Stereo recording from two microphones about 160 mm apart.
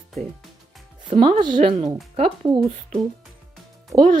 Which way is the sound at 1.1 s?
35° right (ahead or behind).